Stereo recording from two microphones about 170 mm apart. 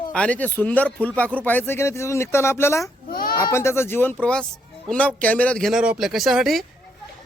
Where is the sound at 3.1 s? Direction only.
60° left (ahead or behind).